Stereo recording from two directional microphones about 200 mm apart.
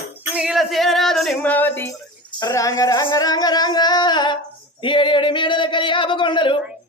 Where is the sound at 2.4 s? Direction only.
15° left (ahead or behind).